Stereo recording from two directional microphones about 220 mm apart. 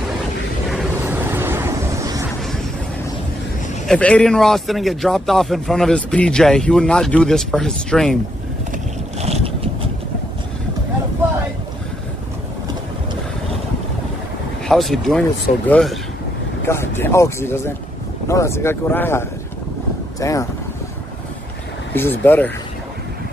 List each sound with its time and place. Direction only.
0.7 s vehicle: 5° right (ahead or behind)
3.8 s speech: 5° left (ahead or behind)
9.2 s boat: 25° right (ahead or behind)
14.7 s speech: centre (ahead or behind)
21.9 s speech: 10° left (ahead or behind)